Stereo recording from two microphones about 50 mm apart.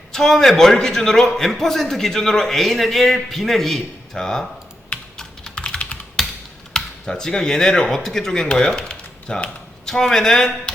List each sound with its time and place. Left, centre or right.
0.1 s a man's voice: centre
5.5 s computer keyboard: left
6.2 s computer keyboard: centre
6.7 s a man's voice: centre